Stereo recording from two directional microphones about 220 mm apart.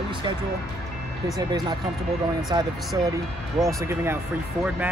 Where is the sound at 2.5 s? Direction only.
15° right (ahead or behind).